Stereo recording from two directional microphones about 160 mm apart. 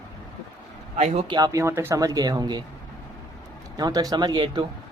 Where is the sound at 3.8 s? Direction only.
25° right (ahead or behind).